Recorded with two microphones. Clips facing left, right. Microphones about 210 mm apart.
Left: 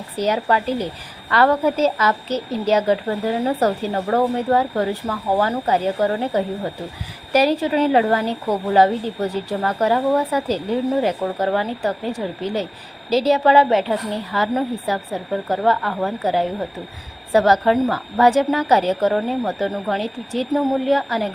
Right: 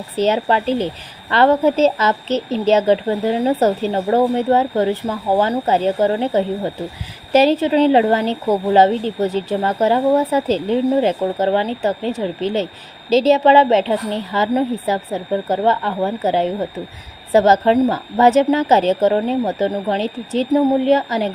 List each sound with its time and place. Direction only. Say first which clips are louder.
0.2 s speech: right 3 dB; 25° right (ahead or behind)